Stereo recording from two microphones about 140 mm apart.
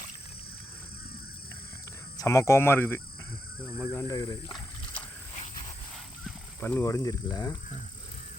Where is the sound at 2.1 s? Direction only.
20° left (ahead or behind).